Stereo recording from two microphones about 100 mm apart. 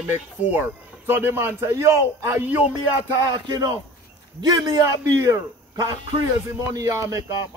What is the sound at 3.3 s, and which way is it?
A man's voice, 40° right (ahead or behind).